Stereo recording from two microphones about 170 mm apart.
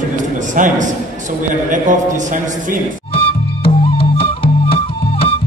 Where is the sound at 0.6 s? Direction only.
50° right (ahead or behind).